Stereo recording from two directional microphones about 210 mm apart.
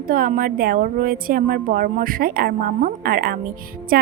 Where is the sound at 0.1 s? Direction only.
40° right (ahead or behind).